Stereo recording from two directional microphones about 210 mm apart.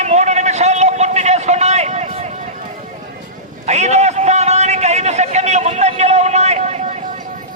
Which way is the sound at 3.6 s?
30° right (ahead or behind).